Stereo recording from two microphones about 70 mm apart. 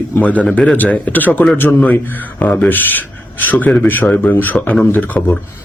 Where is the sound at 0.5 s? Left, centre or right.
Left.